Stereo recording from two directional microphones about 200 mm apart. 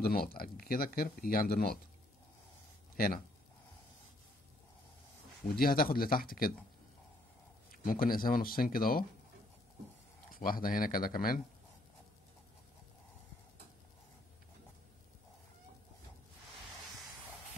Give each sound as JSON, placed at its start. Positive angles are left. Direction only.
{"t": 0.0, "sound": "speech", "side_deg": 50}
{"t": 5.6, "sound": "speech", "side_deg": 45}
{"t": 7.7, "sound": "speech", "side_deg": 45}
{"t": 10.3, "sound": "speech", "side_deg": 45}